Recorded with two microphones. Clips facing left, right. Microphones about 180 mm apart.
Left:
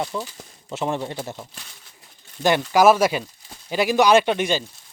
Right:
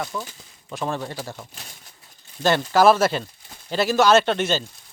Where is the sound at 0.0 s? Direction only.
25° left (ahead or behind).